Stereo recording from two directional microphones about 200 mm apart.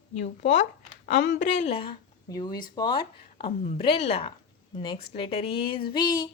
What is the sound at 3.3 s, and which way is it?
A woman's voice, 40° left (ahead or behind).